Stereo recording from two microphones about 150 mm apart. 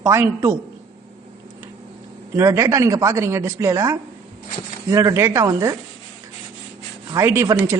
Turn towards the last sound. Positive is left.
turn(degrees=-20)  # may be behind; listen again after turning